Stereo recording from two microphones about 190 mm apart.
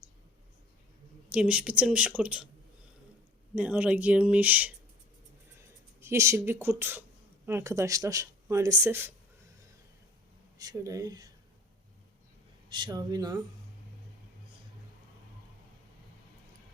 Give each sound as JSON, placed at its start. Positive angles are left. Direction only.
{"t": 1.3, "sound": "speech", "side_deg": -5}
{"t": 3.5, "sound": "speech", "side_deg": -5}
{"t": 6.0, "sound": "speech", "side_deg": -15}
{"t": 10.6, "sound": "speech", "side_deg": -20}
{"t": 12.6, "sound": "speech", "side_deg": -25}